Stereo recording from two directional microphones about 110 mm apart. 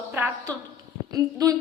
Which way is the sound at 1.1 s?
30° right (ahead or behind).